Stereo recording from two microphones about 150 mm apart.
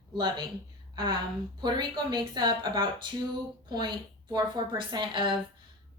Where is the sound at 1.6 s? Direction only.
30° right (ahead or behind).